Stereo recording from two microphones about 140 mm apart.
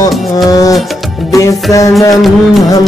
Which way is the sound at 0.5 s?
25° left (ahead or behind).